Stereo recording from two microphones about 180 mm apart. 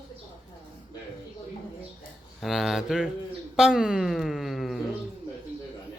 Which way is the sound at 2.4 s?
Centre (ahead or behind).